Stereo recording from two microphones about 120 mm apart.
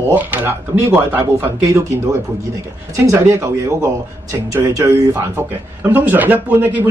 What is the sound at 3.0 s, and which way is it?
Speech, 25° right (ahead or behind).